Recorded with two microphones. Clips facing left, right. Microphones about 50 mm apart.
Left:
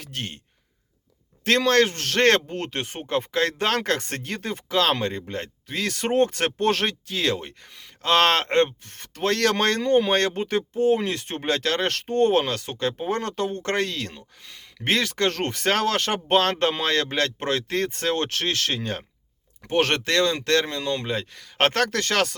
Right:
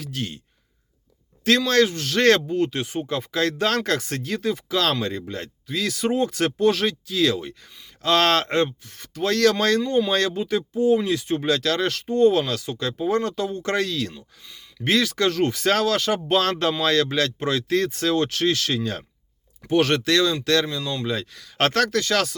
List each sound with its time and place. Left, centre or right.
0.0 s speech: left
1.5 s speech: left
7.7 s speech: left
8.0 s speech: left
14.9 s speech: left